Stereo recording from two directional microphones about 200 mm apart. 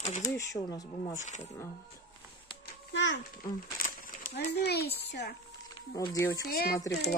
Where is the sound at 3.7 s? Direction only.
45° left (ahead or behind).